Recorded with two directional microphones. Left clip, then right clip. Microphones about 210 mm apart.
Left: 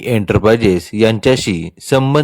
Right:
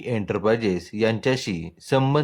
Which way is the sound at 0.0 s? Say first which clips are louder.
Left 10 dB; 40° left (ahead or behind).